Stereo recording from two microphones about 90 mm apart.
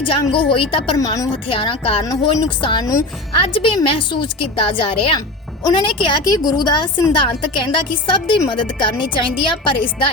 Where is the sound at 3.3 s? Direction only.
80° left.